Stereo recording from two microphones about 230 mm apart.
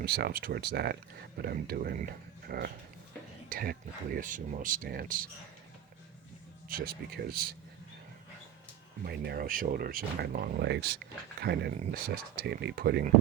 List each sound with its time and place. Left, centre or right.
0.0 s speech: right
6.7 s speech: right
9.0 s speech: right